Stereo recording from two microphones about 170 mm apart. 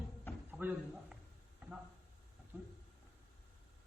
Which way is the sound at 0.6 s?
10° right (ahead or behind).